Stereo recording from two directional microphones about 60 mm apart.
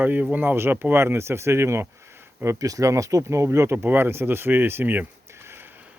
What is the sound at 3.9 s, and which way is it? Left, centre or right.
Speech, right.